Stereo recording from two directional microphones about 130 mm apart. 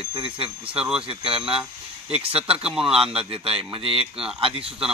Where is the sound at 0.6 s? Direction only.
5° right (ahead or behind).